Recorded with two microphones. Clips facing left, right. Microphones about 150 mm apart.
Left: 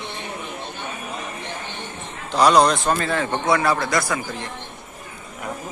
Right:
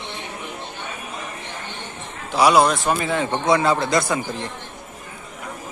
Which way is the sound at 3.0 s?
15° right (ahead or behind).